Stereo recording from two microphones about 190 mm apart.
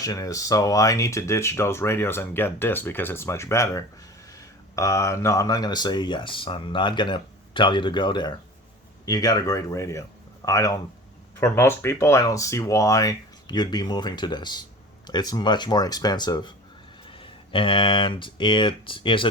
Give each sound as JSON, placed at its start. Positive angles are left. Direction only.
{"t": 0.0, "sound": "speech", "side_deg": 20}